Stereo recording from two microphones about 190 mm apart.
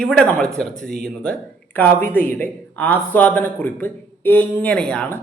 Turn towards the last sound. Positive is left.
turn(degrees=5)  # may be behind; listen again after turning